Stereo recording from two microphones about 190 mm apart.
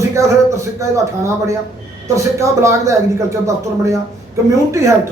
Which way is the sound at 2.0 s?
15° right (ahead or behind).